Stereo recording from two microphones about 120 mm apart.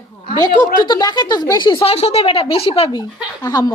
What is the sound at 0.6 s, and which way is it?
Speech, 35° left (ahead or behind).